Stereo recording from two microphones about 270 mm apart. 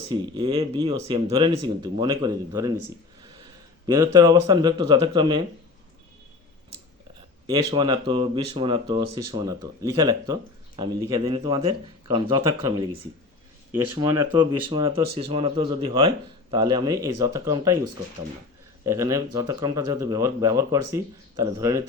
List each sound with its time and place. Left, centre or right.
0.1 s speech: centre
3.8 s speech: centre
7.4 s speech: centre
18.9 s speech: centre